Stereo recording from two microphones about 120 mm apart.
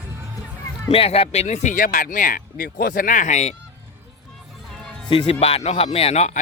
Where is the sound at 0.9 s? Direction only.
55° left (ahead or behind); by 3.5 s 85° left.